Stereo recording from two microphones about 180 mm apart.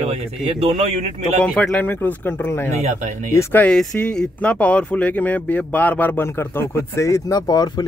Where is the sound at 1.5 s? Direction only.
5° left (ahead or behind).